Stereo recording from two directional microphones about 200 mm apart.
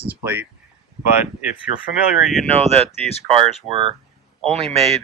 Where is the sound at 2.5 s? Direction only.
30° right (ahead or behind).